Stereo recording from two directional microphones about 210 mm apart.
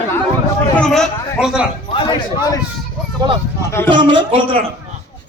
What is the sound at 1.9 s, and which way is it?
Speech, 25° left (ahead or behind).